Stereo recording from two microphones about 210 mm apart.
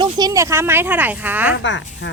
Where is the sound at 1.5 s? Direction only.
60° left (ahead or behind).